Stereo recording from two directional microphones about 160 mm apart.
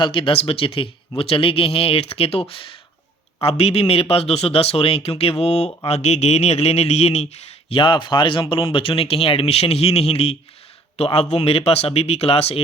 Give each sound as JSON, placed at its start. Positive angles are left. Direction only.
{"t": 0.0, "sound": "speech", "side_deg": 30}